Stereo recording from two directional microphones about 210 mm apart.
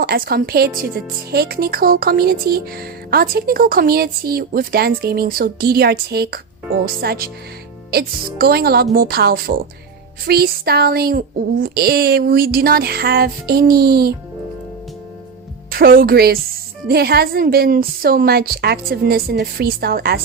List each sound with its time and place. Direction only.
0.0 s speech: 45° right (ahead or behind)
15.7 s speech: 45° right (ahead or behind)